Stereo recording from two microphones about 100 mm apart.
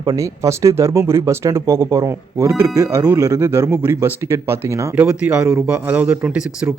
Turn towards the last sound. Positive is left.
turn(degrees=-15)  # may be behind; listen again after turning